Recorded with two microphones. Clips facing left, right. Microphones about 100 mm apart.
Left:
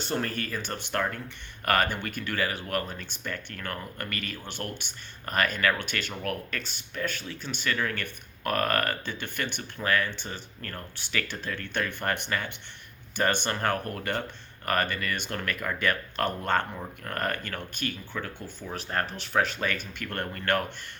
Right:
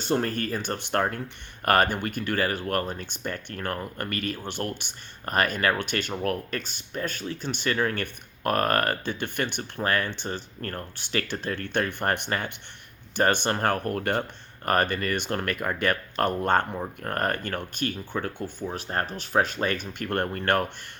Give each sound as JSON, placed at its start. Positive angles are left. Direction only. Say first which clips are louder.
{"t": 0.1, "sound": "speech", "louder": "right 6 dB", "side_deg": -40}